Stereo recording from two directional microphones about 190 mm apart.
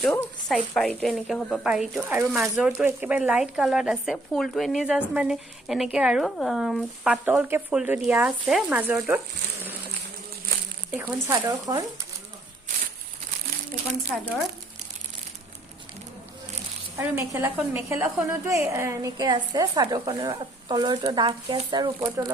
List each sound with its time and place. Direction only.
0.1 s a woman's voice: 10° left (ahead or behind); by 9.7 s 10° right (ahead or behind)
10.9 s speech: 10° right (ahead or behind)
17.0 s a woman's voice: 10° right (ahead or behind)